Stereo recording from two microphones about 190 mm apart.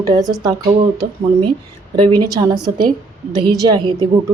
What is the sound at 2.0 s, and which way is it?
A woman's voice, 25° right (ahead or behind).